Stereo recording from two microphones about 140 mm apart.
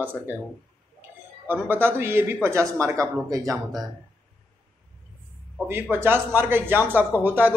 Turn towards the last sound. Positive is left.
turn(degrees=-15)  # may be behind; listen again after turning